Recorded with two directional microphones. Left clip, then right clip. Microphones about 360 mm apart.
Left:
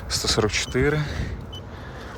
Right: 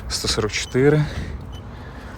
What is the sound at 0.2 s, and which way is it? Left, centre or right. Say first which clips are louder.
Speech: even; centre.